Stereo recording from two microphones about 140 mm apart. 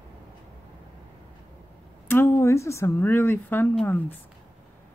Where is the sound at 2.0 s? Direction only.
15° left (ahead or behind).